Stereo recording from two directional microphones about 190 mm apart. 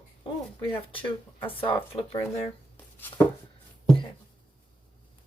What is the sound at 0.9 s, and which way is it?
Speech, 30° left (ahead or behind).